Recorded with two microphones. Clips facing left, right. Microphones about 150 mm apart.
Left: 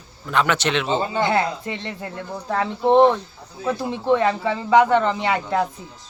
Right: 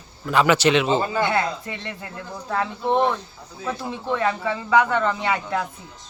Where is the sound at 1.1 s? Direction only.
30° left (ahead or behind).